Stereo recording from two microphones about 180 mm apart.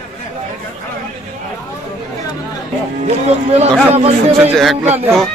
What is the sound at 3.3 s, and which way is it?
Speech, 35° right (ahead or behind).